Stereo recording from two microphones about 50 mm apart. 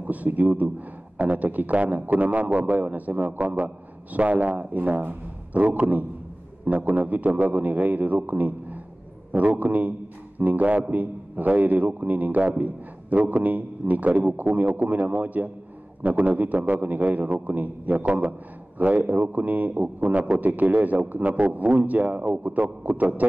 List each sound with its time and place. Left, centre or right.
0.0 s a man's voice: right